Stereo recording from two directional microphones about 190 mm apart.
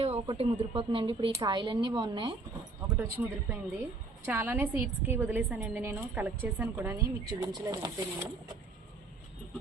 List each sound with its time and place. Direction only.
0.0 s a woman's voice: 30° right (ahead or behind); by 3.2 s 15° right (ahead or behind)
4.3 s a woman's voice: 10° right (ahead or behind)